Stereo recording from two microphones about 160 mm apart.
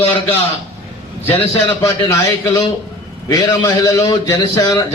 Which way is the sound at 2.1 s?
20° left (ahead or behind).